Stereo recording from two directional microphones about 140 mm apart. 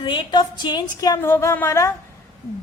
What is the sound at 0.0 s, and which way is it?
A woman's voice, 35° left (ahead or behind).